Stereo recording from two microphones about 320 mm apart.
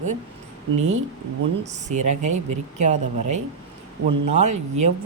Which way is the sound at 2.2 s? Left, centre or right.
Right.